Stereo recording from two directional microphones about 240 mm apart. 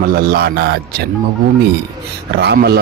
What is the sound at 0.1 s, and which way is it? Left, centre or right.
Speech, right.